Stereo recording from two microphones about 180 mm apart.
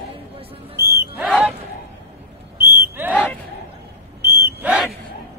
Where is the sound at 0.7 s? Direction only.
15° right (ahead or behind).